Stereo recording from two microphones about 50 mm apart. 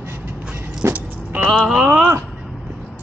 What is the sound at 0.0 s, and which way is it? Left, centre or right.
Vehicle, right.